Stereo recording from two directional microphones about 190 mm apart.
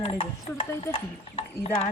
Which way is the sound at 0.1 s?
30° left (ahead or behind).